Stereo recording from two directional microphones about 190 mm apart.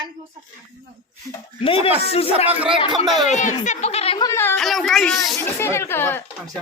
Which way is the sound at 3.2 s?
40° left (ahead or behind).